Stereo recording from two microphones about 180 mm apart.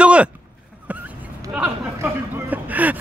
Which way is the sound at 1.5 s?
10° right (ahead or behind).